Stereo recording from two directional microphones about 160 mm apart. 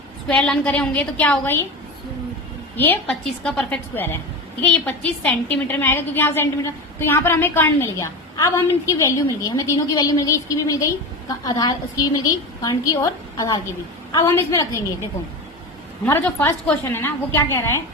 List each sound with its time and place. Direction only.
0.3 s a woman's voice: 5° left (ahead or behind)
3.1 s a woman's voice: 5° left (ahead or behind); by 14.8 s 20° left (ahead or behind)
16.2 s a woman's voice: 10° left (ahead or behind)